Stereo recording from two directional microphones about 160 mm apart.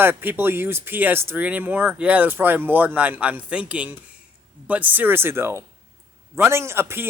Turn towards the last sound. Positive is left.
turn(degrees=-15)  # may be behind; listen again after turning